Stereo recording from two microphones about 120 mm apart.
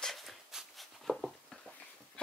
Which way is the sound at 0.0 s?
Centre (ahead or behind).